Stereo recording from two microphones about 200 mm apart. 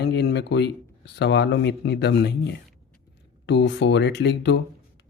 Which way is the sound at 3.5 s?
60° left (ahead or behind).